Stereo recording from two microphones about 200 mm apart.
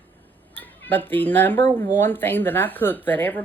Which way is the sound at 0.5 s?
10° left (ahead or behind).